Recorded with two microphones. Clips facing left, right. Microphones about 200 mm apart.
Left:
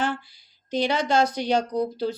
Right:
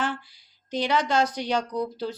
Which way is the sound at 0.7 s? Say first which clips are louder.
Left 2 dB; 25° left (ahead or behind).